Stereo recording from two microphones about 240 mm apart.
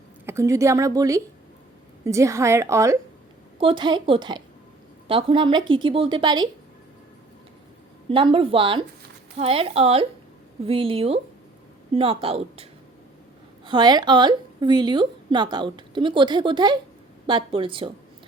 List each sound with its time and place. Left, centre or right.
0.3 s a woman's voice: centre
8.1 s a woman's voice: right
13.7 s a woman's voice: centre